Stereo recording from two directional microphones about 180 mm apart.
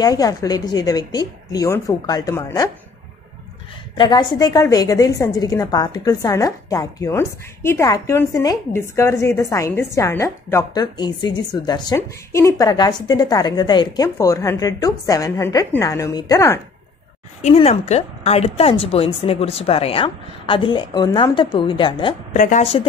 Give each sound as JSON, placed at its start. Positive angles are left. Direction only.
{"t": 0.0, "sound": "a woman's voice", "side_deg": 20}
{"t": 3.9, "sound": "a woman's voice", "side_deg": 25}
{"t": 17.4, "sound": "a woman's voice", "side_deg": 35}
{"t": 22.3, "sound": "a woman's voice", "side_deg": 45}